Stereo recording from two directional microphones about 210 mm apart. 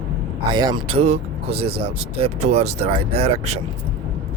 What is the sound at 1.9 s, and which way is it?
Speech, 30° right (ahead or behind).